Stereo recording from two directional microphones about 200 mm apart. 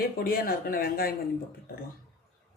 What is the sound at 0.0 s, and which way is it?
Speech, 45° left (ahead or behind).